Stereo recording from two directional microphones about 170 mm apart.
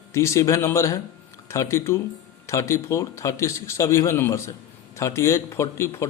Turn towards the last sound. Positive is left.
turn(degrees=15)  # may be behind; listen again after turning